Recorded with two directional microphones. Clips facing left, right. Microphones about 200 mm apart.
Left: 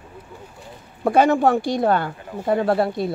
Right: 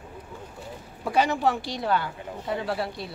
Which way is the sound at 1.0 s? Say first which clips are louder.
Left 7 dB; 50° left (ahead or behind).